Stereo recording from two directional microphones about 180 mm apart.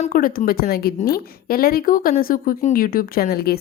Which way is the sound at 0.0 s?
50° left (ahead or behind).